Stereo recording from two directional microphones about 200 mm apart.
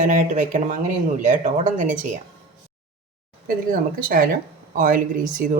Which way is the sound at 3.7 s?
45° right (ahead or behind).